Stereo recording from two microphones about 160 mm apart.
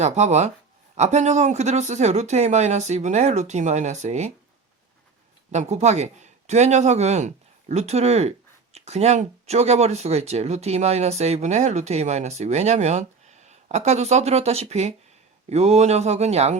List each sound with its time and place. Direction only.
0.0 s speech: 45° right (ahead or behind)
5.5 s speech: 45° right (ahead or behind)